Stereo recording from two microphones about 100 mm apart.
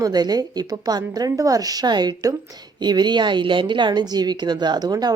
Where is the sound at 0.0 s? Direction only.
45° right (ahead or behind).